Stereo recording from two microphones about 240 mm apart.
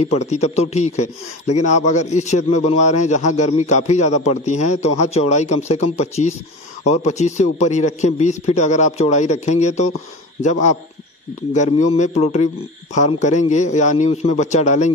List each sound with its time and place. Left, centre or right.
0.0 s a man's voice: left